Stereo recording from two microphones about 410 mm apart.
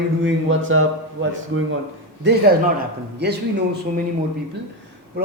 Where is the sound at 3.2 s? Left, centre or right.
Right.